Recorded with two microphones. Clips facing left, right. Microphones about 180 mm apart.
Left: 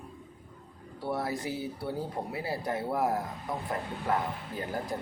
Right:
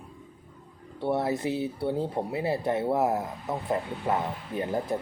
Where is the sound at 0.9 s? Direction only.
25° right (ahead or behind).